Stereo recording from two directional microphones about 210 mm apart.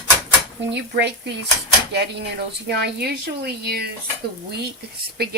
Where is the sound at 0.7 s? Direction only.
55° right (ahead or behind).